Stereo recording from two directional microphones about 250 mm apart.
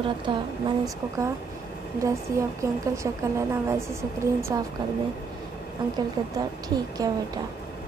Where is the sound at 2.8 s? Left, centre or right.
Centre.